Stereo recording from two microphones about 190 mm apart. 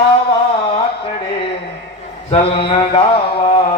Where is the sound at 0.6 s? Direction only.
30° left (ahead or behind).